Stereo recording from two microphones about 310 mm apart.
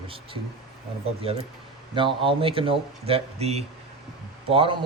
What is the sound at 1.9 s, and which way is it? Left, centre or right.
Speech, centre.